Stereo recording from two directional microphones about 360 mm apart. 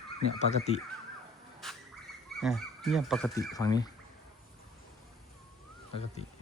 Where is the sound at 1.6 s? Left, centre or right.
Centre.